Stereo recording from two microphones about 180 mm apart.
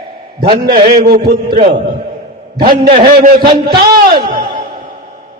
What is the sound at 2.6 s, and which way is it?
Speech, 30° right (ahead or behind).